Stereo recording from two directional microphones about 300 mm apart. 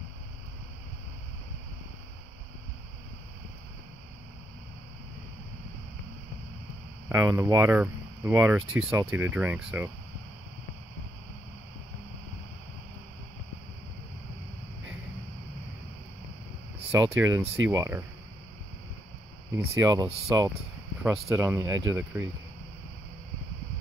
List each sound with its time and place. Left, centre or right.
7.1 s speech: centre
17.0 s speech: centre
19.6 s speech: centre